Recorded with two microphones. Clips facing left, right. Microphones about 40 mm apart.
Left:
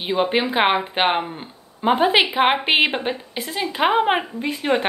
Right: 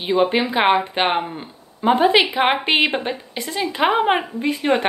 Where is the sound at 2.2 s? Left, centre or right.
Centre.